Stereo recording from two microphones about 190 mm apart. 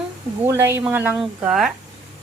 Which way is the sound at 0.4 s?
15° right (ahead or behind).